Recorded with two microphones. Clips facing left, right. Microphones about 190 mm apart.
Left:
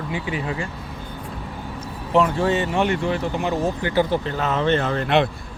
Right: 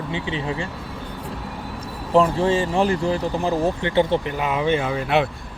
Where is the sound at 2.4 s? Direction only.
30° right (ahead or behind).